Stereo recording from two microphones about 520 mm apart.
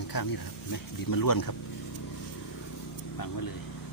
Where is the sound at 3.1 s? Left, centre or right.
Left.